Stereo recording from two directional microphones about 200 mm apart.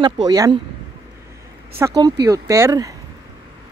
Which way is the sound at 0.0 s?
20° right (ahead or behind).